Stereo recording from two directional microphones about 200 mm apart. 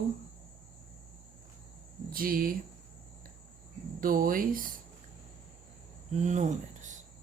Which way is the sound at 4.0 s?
45° right (ahead or behind).